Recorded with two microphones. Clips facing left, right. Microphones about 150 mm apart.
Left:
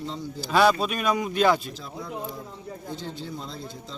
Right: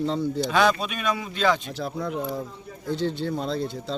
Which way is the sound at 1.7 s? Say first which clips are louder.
Right 7 dB; 70° right (ahead or behind).